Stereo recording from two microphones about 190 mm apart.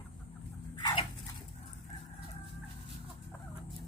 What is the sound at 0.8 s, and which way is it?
Dog, 25° left (ahead or behind).